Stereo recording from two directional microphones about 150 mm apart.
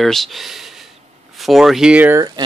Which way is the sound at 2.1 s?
25° right (ahead or behind).